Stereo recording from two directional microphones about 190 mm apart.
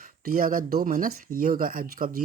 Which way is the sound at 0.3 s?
50° right (ahead or behind).